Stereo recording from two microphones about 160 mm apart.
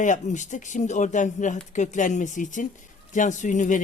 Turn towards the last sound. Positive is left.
turn(degrees=55)  # may be behind; listen again after turning